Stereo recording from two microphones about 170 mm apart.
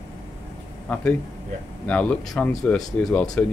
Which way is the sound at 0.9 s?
5° left (ahead or behind).